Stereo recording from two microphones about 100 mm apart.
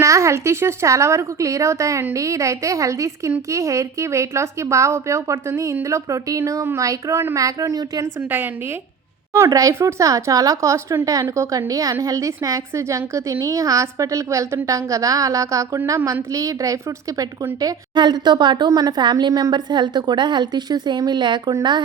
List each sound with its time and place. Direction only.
0.0 s a woman's voice: 30° right (ahead or behind)
9.5 s a woman's voice: 35° right (ahead or behind); by 21.8 s 50° right (ahead or behind)